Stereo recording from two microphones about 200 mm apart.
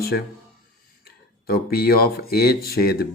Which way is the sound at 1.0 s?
50° left (ahead or behind).